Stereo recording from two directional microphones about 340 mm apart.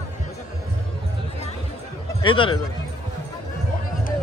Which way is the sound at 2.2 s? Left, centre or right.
Centre.